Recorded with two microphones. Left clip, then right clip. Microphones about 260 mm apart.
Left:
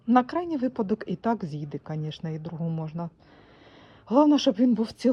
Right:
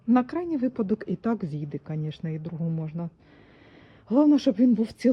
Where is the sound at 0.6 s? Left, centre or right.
Centre.